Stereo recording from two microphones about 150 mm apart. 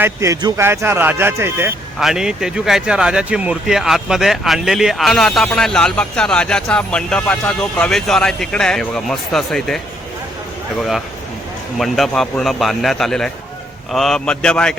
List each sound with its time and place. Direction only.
0.0 s speech: 20° right (ahead or behind)
2.0 s speech: 5° right (ahead or behind)
11.8 s speech: centre (ahead or behind)